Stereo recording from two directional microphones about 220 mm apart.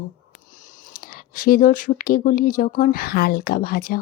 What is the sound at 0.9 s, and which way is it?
Speech, 40° left (ahead or behind).